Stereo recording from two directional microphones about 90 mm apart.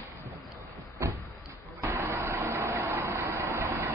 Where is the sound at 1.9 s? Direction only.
25° right (ahead or behind).